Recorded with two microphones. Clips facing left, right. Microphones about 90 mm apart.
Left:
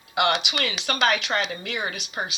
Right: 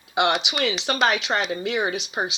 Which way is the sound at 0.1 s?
25° right (ahead or behind).